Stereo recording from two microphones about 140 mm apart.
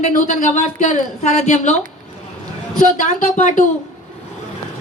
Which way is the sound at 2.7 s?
65° left (ahead or behind).